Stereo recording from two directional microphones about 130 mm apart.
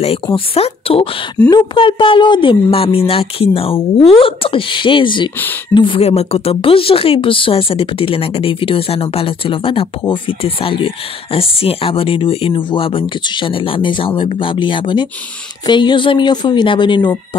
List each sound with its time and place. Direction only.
0.0 s speech: 50° left (ahead or behind)